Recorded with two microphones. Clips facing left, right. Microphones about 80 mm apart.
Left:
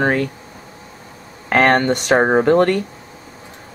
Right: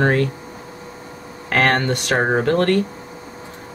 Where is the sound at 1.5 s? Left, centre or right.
Centre.